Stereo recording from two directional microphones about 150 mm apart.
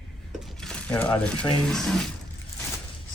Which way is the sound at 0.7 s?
10° left (ahead or behind).